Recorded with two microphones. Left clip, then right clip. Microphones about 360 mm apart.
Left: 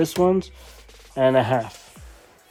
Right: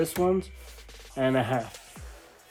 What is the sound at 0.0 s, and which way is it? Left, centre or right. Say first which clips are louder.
Speech: left 6 dB; left.